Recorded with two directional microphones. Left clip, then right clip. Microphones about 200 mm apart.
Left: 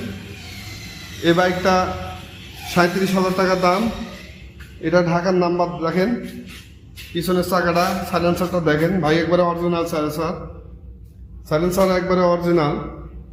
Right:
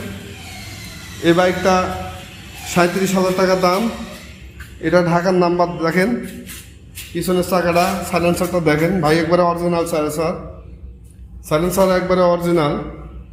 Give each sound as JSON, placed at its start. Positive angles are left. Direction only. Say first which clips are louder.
{"t": 1.2, "sound": "a man's voice", "louder": "right 2 dB", "side_deg": 0}
{"t": 4.8, "sound": "a man's voice", "louder": "right 3 dB", "side_deg": -15}
{"t": 7.2, "sound": "a man's voice", "louder": "right 2 dB", "side_deg": 0}
{"t": 11.4, "sound": "a man's voice", "louder": "right 2 dB", "side_deg": -15}